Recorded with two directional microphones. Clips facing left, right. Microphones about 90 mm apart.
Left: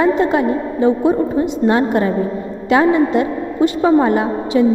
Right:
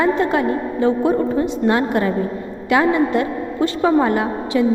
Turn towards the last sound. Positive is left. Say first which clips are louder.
# left 3 dB
turn(degrees=25)  # may be behind; listen again after turning